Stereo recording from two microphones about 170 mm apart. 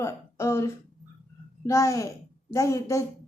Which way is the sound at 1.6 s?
20° left (ahead or behind).